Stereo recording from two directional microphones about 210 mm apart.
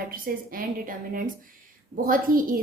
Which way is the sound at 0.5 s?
40° right (ahead or behind).